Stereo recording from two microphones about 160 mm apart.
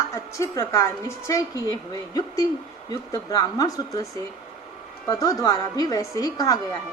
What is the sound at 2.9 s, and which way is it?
A woman's voice, 20° left (ahead or behind).